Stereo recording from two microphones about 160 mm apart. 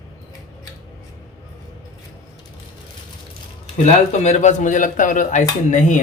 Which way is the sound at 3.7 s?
45° left (ahead or behind).